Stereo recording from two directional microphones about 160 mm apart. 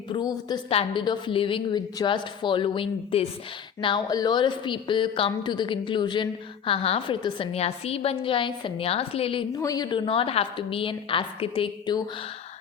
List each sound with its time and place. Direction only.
0.1 s a woman's voice: 25° left (ahead or behind)
9.6 s a woman's voice: 20° left (ahead or behind)